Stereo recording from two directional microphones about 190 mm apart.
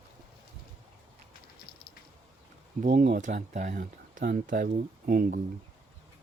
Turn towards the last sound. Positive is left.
turn(degrees=-50)  # may be behind; listen again after turning